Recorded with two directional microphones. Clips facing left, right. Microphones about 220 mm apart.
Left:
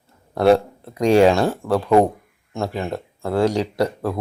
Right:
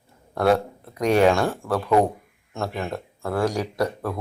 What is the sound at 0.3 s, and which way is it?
Speech, 25° left (ahead or behind).